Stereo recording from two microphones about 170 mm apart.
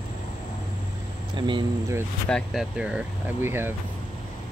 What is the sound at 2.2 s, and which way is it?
Speech, 5° left (ahead or behind).